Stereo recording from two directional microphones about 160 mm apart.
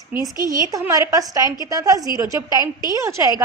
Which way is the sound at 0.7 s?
20° right (ahead or behind).